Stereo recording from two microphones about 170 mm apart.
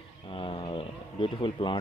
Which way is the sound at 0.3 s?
30° left (ahead or behind).